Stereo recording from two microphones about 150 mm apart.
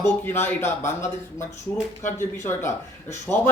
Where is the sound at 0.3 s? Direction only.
15° left (ahead or behind).